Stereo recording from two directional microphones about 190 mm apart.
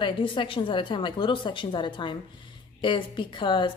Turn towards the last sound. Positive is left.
turn(degrees=25)  # may be behind; listen again after turning